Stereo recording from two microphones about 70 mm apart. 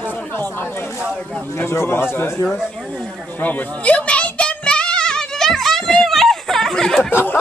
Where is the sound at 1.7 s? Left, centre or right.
Left.